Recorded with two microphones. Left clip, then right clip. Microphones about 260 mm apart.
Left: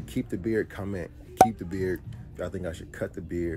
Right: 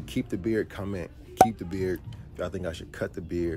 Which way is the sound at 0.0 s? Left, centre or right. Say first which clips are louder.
Right 1 dB; centre.